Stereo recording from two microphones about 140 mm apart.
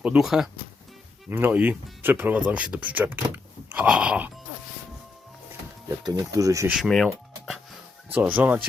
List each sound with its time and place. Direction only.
0.0 s speech: 5° right (ahead or behind)
1.3 s speech: 15° right (ahead or behind)
6.0 s speech: 30° right (ahead or behind)
6.7 s speech: centre (ahead or behind)
8.1 s speech: 10° right (ahead or behind)